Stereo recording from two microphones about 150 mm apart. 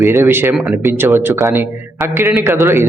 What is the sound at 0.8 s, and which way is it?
A man's voice, 20° right (ahead or behind).